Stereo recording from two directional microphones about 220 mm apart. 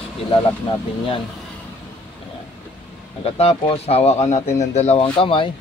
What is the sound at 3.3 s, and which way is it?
Speech, 25° left (ahead or behind).